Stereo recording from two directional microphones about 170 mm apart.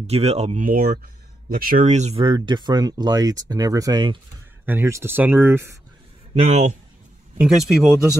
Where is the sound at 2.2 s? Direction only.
25° right (ahead or behind).